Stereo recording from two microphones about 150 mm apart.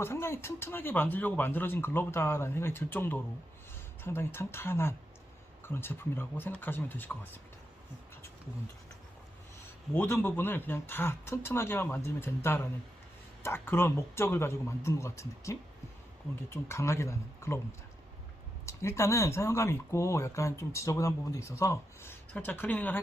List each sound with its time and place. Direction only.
0.0 s speech: 15° left (ahead or behind)
9.9 s speech: 15° left (ahead or behind)